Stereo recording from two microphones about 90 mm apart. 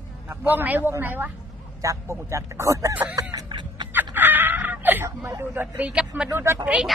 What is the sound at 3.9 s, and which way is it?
Chicken, 20° right (ahead or behind).